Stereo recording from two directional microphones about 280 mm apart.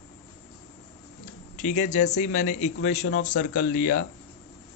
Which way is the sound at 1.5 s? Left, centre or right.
Left.